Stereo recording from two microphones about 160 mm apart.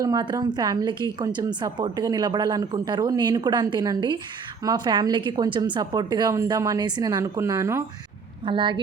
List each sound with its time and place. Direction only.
0.0 s a woman's voice: 25° right (ahead or behind)
8.4 s speech: 30° right (ahead or behind)